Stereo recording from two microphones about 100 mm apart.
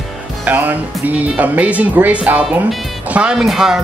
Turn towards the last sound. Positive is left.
turn(degrees=-5)  # may be behind; listen again after turning